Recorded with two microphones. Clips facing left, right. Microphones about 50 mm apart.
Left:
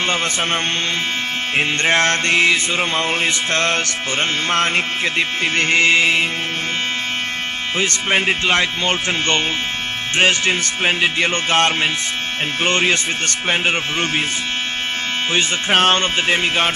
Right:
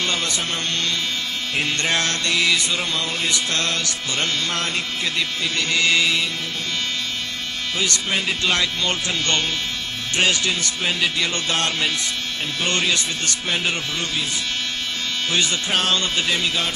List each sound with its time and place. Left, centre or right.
1.5 s music: left
7.8 s music: left
15.3 s speech: left